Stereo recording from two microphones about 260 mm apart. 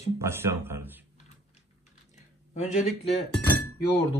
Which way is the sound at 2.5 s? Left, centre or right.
Left.